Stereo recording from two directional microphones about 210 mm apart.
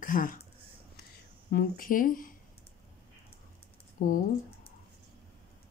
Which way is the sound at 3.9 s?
40° left (ahead or behind).